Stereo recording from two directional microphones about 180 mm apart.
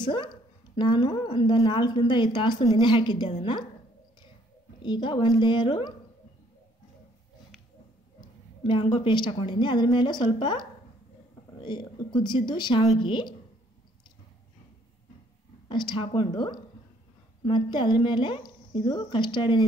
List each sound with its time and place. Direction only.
0.0 s a woman's voice: 25° left (ahead or behind)
4.8 s a woman's voice: 25° left (ahead or behind)
8.2 s a woman's voice: 25° left (ahead or behind)
15.7 s a woman's voice: 25° left (ahead or behind)